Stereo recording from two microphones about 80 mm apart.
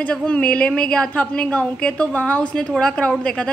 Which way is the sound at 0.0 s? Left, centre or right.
Centre.